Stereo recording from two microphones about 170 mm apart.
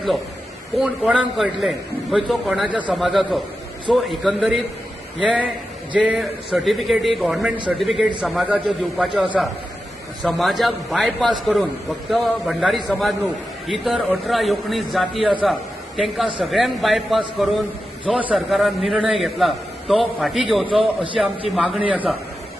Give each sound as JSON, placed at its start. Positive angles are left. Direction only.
{"t": 0.8, "sound": "a man's voice", "side_deg": 0}
{"t": 20.7, "sound": "a man's voice", "side_deg": -30}
{"t": 21.2, "sound": "a man's voice", "side_deg": 0}